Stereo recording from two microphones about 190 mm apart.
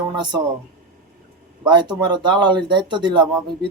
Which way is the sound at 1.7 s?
25° right (ahead or behind).